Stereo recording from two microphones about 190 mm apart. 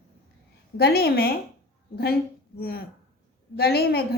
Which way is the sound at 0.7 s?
55° left (ahead or behind).